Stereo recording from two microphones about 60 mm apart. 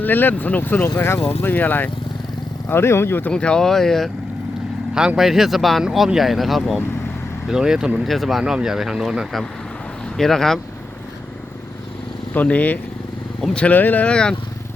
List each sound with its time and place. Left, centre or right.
0.0 s speech: left
0.9 s speech: left
2.6 s speech: left
3.3 s speech: centre
4.9 s speech: centre
8.0 s speech: centre
10.2 s speech: centre
12.3 s speech: left
14.1 s speech: centre